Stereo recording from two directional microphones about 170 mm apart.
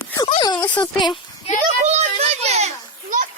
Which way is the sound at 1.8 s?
40° right (ahead or behind).